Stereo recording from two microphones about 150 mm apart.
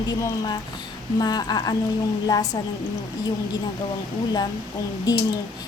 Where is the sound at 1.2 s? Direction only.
25° left (ahead or behind).